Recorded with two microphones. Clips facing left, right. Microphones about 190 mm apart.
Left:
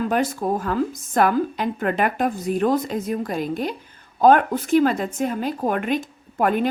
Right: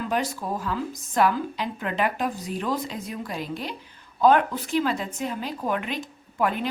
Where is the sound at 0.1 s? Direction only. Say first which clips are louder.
Left 6 dB; 50° left (ahead or behind).